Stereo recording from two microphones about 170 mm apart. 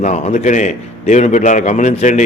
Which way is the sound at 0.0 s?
40° left (ahead or behind).